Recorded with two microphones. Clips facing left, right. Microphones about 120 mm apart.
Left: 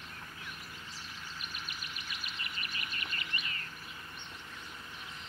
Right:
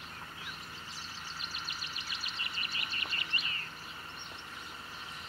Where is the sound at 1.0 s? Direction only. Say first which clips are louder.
Right 1 dB; 30° right (ahead or behind).